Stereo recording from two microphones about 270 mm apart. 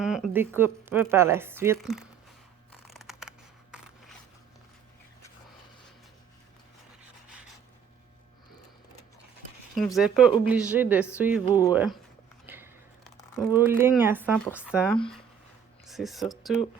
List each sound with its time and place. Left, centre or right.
0.0 s speech: centre
2.8 s mechanisms: centre
9.7 s speech: centre
11.4 s speech: centre
11.7 s speech: centre
12.5 s a sound: centre
13.5 s speech: centre
15.9 s speech: centre